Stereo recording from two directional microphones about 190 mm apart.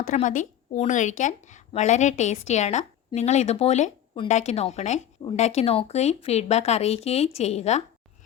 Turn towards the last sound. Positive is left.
turn(degrees=35)  # may be behind; listen again after turning